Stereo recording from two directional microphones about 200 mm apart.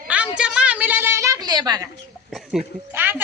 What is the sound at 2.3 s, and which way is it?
Speech, centre (ahead or behind).